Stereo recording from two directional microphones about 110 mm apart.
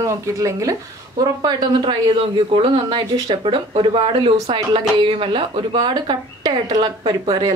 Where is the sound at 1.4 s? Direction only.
40° right (ahead or behind).